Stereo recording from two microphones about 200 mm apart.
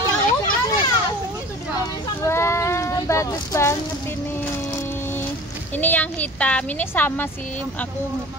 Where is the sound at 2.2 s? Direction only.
15° left (ahead or behind).